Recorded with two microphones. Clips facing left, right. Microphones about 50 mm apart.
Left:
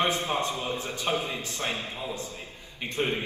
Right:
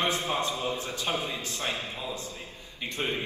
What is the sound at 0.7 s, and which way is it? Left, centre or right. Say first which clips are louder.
Speech: left 1 dB; right.